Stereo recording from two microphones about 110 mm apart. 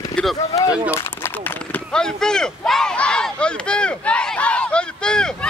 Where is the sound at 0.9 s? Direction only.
20° left (ahead or behind).